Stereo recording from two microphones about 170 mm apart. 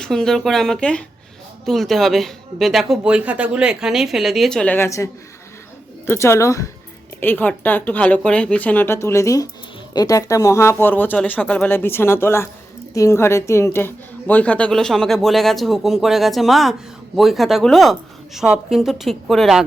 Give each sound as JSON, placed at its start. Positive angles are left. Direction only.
{"t": 0.0, "sound": "a woman's voice", "side_deg": 0}
{"t": 6.1, "sound": "a woman's voice", "side_deg": 15}